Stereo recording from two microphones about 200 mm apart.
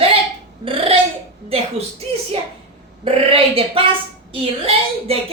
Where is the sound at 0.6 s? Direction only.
25° right (ahead or behind).